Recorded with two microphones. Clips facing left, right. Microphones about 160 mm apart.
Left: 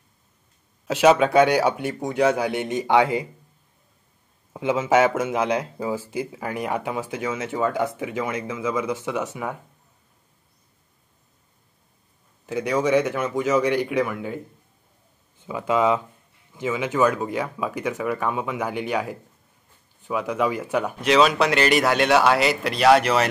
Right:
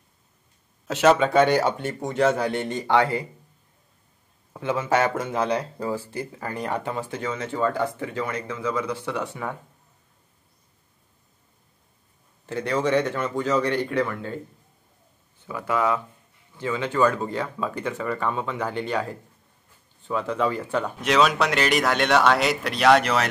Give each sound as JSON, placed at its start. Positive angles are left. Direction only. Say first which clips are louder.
{"t": 0.8, "sound": "speech", "louder": "left 2 dB", "side_deg": 5}
{"t": 4.6, "sound": "speech", "louder": "left 4 dB", "side_deg": 10}
{"t": 12.4, "sound": "speech", "louder": "left 2 dB", "side_deg": 10}
{"t": 15.4, "sound": "speech", "louder": "left 3 dB", "side_deg": 15}
{"t": 21.0, "sound": "speech", "louder": "left 3 dB", "side_deg": 0}